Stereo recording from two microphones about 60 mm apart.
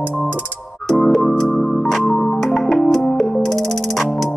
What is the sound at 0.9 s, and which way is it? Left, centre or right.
Music, centre.